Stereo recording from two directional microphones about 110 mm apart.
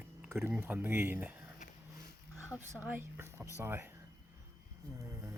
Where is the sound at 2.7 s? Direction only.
15° right (ahead or behind).